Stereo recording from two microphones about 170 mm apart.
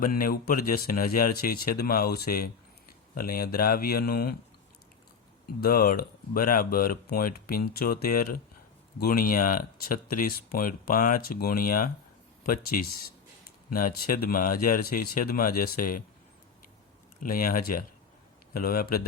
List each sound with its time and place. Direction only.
0.0 s speech: 60° left (ahead or behind)
5.5 s speech: 60° left (ahead or behind)
17.2 s speech: 55° left (ahead or behind)